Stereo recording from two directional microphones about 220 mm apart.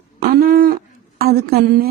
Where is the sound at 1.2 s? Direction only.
45° right (ahead or behind).